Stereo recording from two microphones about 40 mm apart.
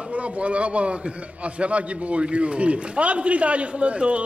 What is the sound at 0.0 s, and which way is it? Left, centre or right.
A man's voice, right.